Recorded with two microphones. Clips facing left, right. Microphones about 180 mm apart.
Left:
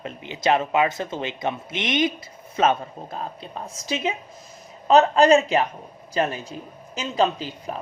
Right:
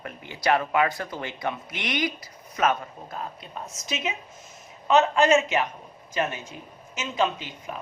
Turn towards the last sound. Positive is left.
turn(degrees=35)  # may be behind; listen again after turning